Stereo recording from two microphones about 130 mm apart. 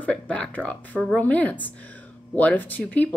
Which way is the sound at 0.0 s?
10° left (ahead or behind).